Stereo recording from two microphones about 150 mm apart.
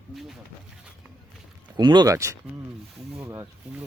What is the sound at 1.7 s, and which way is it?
Speech, 30° right (ahead or behind).